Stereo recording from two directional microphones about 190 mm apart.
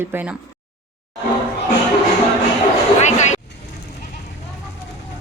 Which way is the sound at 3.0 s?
40° left (ahead or behind).